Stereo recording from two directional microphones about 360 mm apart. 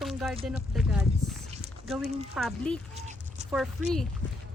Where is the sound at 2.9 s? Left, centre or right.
Centre.